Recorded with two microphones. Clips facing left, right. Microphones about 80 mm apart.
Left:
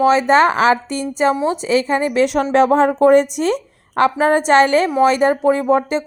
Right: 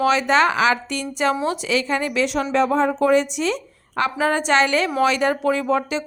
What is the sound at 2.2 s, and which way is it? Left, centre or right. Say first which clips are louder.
Speech: left 6 dB; left.